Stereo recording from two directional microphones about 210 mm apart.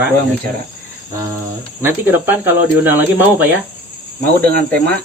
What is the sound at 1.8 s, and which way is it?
Speech, 10° right (ahead or behind).